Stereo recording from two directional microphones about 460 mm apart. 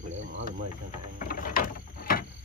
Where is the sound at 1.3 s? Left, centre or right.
Centre.